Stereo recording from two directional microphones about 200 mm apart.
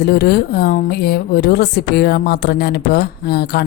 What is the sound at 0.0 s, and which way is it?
Speech, 55° left (ahead or behind).